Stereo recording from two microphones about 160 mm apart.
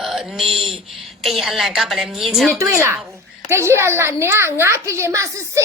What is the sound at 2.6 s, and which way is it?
A woman's voice, 15° right (ahead or behind).